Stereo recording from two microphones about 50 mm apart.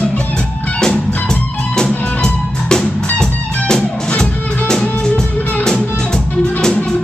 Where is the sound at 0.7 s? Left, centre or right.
Centre.